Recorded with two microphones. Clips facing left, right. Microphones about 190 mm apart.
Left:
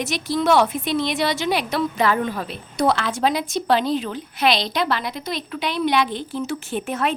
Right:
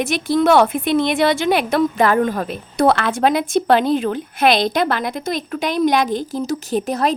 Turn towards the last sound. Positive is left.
turn(degrees=-35)  # may be behind; listen again after turning